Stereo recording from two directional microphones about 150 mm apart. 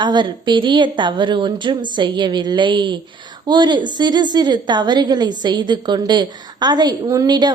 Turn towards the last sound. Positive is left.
turn(degrees=-30)  # may be behind; listen again after turning